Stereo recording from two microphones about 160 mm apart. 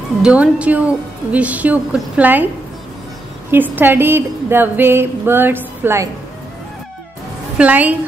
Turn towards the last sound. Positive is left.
turn(degrees=-10)  # may be behind; listen again after turning